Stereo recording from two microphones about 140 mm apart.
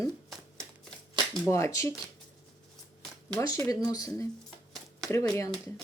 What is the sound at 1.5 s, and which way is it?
Speech, 20° left (ahead or behind).